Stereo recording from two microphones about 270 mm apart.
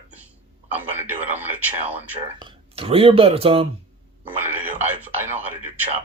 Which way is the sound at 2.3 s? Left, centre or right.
Centre.